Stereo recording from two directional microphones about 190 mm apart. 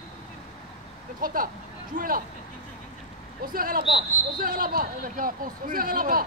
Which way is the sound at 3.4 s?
50° right (ahead or behind).